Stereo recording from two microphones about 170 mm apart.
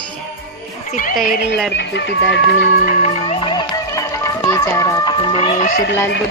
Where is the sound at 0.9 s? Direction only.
50° left (ahead or behind).